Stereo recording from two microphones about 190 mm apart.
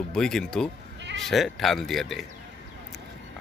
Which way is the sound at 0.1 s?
5° left (ahead or behind).